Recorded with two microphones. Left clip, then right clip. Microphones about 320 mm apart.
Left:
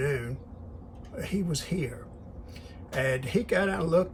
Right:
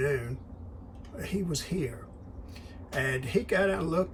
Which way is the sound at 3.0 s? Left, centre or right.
Centre.